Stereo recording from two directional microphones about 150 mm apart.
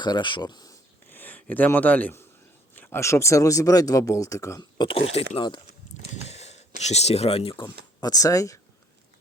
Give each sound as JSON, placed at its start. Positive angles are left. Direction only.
{"t": 0.0, "sound": "speech", "side_deg": 30}
{"t": 1.1, "sound": "speech", "side_deg": 10}
{"t": 6.1, "sound": "a sound", "side_deg": 45}
{"t": 8.0, "sound": "speech", "side_deg": 25}